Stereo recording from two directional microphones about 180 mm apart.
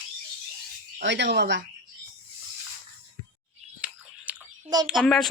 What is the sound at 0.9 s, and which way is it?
Speech, 80° right.